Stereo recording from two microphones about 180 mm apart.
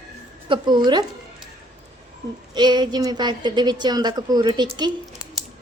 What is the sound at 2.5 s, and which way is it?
A woman's voice, 25° right (ahead or behind).